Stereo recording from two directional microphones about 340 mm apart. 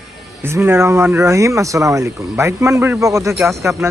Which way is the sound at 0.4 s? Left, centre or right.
Centre.